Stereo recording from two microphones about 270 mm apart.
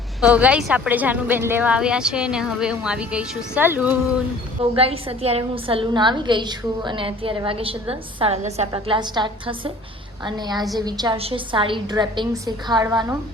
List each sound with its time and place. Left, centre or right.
0.2 s a woman's voice: centre
4.7 s a woman's voice: right